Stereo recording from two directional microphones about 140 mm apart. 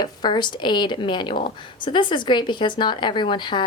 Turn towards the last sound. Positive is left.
turn(degrees=35)  # may be behind; listen again after turning